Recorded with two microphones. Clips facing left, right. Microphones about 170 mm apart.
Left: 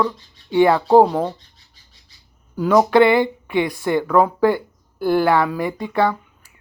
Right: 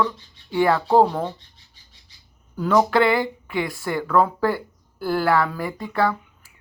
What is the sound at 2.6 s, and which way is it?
Speech, 15° left (ahead or behind).